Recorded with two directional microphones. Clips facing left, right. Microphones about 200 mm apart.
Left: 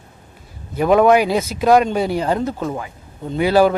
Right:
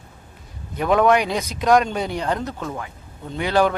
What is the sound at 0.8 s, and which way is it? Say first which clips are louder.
Speech: left 4 dB; 5° left (ahead or behind).